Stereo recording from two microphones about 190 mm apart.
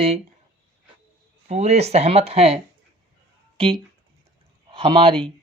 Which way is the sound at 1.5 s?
35° right (ahead or behind).